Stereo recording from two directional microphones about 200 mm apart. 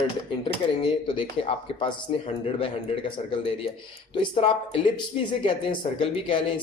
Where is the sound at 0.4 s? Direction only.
25° left (ahead or behind).